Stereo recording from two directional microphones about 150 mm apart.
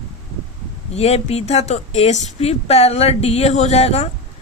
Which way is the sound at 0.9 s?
45° left (ahead or behind).